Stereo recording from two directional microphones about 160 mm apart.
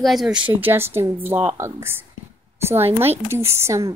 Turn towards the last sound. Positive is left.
turn(degrees=-20)  # may be behind; listen again after turning